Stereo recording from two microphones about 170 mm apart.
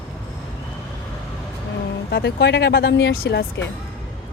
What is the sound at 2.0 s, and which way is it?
Speech, 80° left.